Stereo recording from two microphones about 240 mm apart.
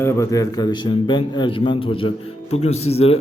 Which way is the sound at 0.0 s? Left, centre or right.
Centre.